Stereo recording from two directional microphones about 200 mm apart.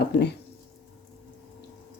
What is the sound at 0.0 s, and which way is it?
Speech, 55° left (ahead or behind).